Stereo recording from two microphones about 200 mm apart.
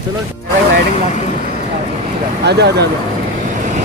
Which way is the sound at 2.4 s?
55° right (ahead or behind).